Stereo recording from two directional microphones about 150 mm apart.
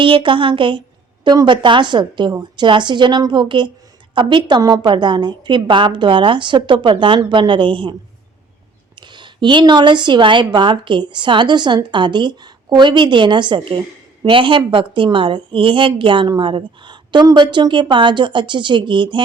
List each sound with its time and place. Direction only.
0.0 s a woman's voice: 35° right (ahead or behind)
9.0 s a woman's voice: 30° right (ahead or behind)